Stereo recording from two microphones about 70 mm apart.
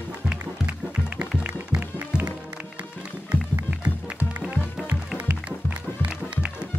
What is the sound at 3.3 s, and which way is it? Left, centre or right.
Music, centre.